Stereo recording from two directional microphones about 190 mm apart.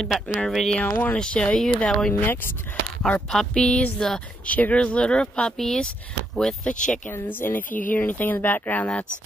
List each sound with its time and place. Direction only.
0.0 s speech: 5° left (ahead or behind)
6.7 s speech: 40° left (ahead or behind)
7.1 s speech: 10° left (ahead or behind)